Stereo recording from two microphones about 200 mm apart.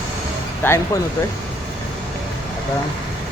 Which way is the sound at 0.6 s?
15° left (ahead or behind).